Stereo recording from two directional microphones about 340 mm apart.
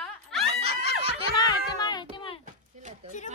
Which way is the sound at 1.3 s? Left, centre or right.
Centre.